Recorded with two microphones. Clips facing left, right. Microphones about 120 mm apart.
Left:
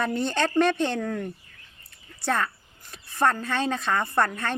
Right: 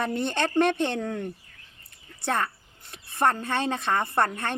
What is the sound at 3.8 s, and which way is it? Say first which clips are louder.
Speech: even; 20° right (ahead or behind).